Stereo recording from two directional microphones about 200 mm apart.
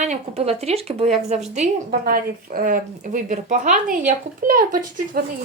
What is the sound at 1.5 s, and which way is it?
A woman's voice, 40° right (ahead or behind).